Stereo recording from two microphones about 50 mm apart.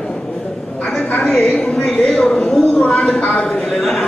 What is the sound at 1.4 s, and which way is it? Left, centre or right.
A woman's voice, centre.